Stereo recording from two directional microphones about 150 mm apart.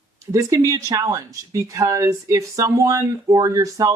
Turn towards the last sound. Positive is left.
turn(degrees=-20)  # may be behind; listen again after turning